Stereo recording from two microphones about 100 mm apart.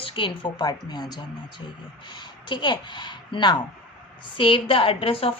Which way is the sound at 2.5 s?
50° left (ahead or behind).